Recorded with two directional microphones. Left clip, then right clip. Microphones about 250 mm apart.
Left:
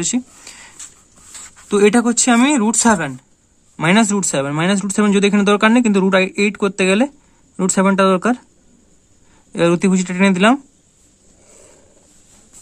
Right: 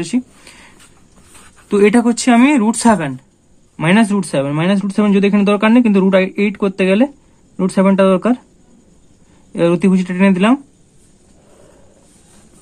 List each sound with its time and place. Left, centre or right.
0.0 s a sound: centre
1.7 s speech: centre
9.5 s speech: centre